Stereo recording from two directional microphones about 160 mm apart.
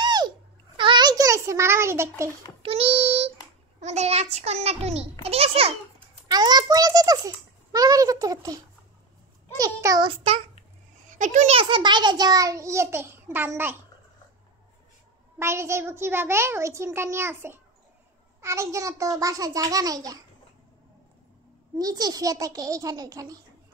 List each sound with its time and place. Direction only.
0.0 s babbling: 25° right (ahead or behind)
0.7 s a sound: 30° right (ahead or behind)
2.6 s a child's voice: 35° right (ahead or behind)
6.2 s a child's voice: 25° right (ahead or behind)
9.6 s a child's voice: 20° right (ahead or behind)
10.0 s a child's voice: 40° right (ahead or behind)
11.1 s a child's voice: 50° right (ahead or behind)
11.5 s a child's voice: 30° right (ahead or behind); by 13.7 s 15° right (ahead or behind)
15.3 s a child's voice: 15° right (ahead or behind)
21.7 s a child's voice: 25° right (ahead or behind)